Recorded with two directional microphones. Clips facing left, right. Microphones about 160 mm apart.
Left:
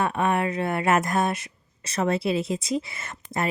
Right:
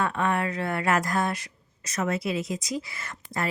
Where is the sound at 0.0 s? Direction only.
20° left (ahead or behind).